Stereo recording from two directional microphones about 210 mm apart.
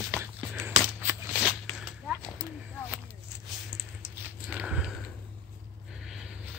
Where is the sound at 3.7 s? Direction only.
25° left (ahead or behind).